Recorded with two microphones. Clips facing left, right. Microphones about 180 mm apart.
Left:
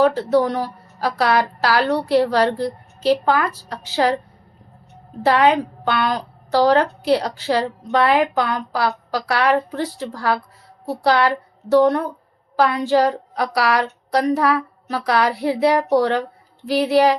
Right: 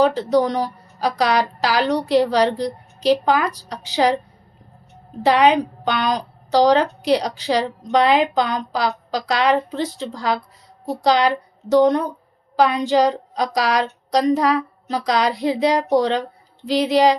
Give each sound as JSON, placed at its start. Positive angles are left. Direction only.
{"t": 0.0, "sound": "a woman's voice", "side_deg": -15}
{"t": 5.2, "sound": "a woman's voice", "side_deg": -15}